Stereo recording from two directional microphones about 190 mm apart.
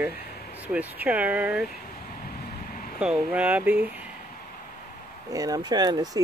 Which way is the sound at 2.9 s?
5° right (ahead or behind).